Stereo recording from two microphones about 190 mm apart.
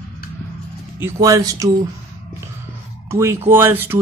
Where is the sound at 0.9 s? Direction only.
15° right (ahead or behind).